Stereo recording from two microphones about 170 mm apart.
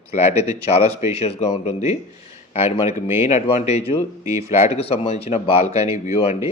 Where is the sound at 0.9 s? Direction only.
35° left (ahead or behind).